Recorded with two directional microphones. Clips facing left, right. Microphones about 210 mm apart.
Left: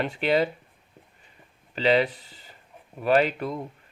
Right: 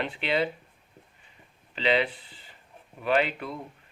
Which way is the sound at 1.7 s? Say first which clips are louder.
Left 4 dB; 40° left (ahead or behind).